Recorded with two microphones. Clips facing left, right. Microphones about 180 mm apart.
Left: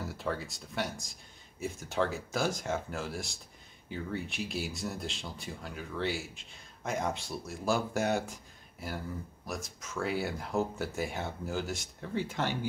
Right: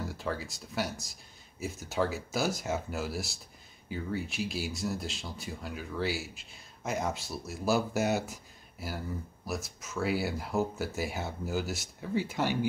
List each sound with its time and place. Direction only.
0.0 s speech: centre (ahead or behind)